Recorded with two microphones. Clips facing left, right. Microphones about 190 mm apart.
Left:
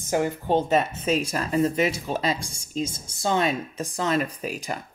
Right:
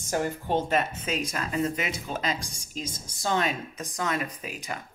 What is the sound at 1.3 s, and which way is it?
Speech, 30° left (ahead or behind).